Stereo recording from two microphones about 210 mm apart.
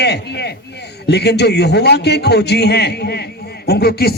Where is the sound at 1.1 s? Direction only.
50° left (ahead or behind).